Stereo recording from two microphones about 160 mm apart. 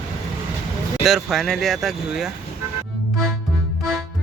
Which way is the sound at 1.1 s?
Centre (ahead or behind).